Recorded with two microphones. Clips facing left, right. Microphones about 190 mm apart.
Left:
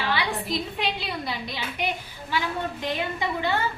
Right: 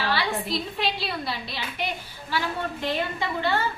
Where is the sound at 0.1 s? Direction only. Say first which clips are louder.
Left 1 dB; 15° left (ahead or behind).